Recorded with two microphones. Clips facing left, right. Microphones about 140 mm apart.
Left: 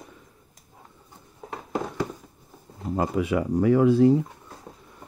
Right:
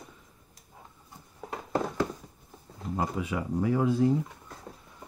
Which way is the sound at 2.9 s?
75° left (ahead or behind).